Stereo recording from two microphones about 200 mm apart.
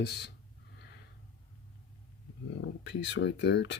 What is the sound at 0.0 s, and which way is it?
Speech, 55° left (ahead or behind).